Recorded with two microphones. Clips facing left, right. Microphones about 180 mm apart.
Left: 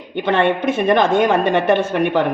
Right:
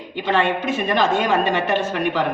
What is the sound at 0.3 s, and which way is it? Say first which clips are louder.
A woman's voice: left 4 dB; 55° left (ahead or behind).